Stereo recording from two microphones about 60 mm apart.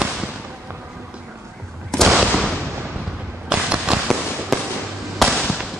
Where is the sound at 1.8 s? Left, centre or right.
Centre.